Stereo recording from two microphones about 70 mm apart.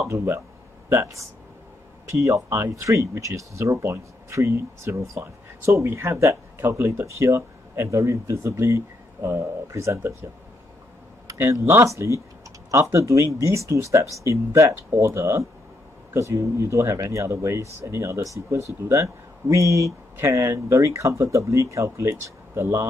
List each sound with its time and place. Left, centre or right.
0.1 s speech: right
0.8 s speech: right
11.3 s speech: right